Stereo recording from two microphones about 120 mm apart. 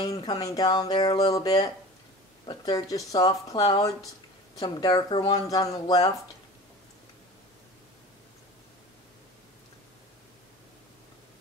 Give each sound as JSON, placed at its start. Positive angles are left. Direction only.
{"t": 0.0, "sound": "speech", "side_deg": 30}